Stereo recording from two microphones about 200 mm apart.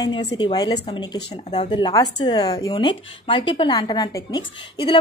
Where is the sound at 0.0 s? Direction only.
20° left (ahead or behind).